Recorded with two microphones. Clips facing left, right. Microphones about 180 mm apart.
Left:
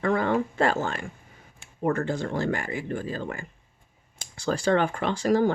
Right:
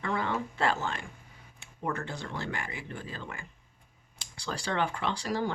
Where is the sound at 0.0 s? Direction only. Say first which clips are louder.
Left 8 dB; 50° left (ahead or behind).